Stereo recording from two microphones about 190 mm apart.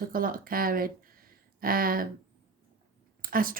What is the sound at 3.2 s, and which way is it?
Speech, 50° right (ahead or behind).